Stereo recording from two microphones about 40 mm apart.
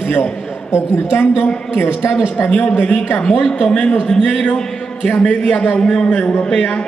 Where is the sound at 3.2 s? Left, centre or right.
Centre.